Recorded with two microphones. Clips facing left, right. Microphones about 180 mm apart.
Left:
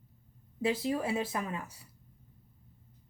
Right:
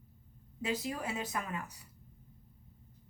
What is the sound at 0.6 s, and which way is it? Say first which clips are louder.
Speech: left 6 dB; 30° left (ahead or behind).